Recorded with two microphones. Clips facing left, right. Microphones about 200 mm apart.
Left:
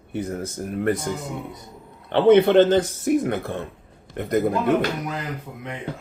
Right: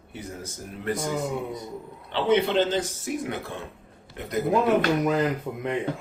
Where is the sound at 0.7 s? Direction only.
55° left (ahead or behind).